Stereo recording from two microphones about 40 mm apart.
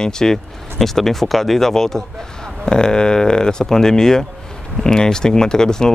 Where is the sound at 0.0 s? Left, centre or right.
Centre.